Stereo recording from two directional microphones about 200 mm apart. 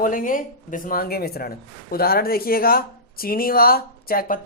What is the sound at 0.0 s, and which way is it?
Speech, 45° left (ahead or behind).